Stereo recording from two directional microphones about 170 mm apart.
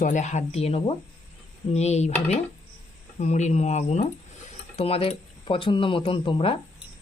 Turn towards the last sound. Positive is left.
turn(degrees=30)  # may be behind; listen again after turning